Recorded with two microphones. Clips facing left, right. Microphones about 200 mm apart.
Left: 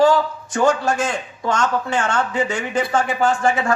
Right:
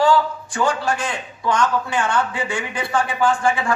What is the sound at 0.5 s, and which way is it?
A man's voice, 45° left (ahead or behind).